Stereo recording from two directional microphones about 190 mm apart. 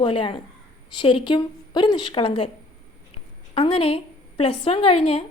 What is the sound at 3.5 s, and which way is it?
A woman's voice, 30° left (ahead or behind).